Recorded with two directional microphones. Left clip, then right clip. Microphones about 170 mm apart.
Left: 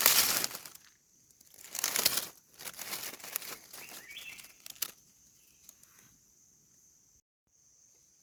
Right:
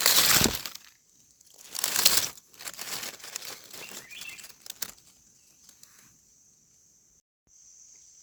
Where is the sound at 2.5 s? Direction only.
Centre (ahead or behind).